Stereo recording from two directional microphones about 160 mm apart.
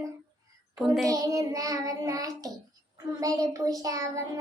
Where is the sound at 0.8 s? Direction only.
Centre (ahead or behind).